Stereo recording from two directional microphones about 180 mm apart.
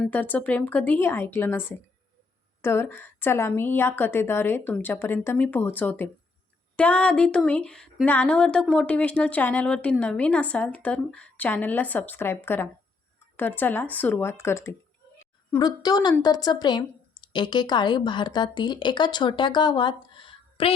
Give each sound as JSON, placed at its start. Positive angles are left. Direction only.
{"t": 0.1, "sound": "speech", "side_deg": 10}